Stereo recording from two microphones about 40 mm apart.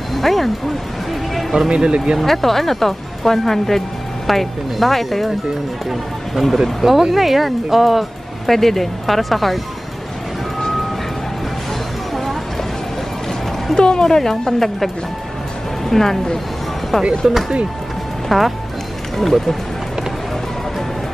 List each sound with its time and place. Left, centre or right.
0.1 s a sound: centre
1.7 s speech: centre
2.1 s speech: centre
13.7 s speech: centre
18.3 s speech: centre